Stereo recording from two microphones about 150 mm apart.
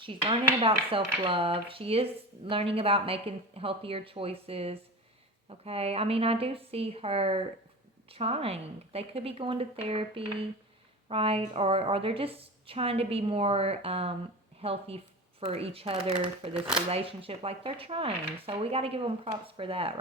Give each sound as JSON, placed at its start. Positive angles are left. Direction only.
{"t": 0.0, "sound": "speech", "side_deg": -35}
{"t": 16.6, "sound": "speech", "side_deg": -5}
{"t": 16.9, "sound": "speech", "side_deg": -40}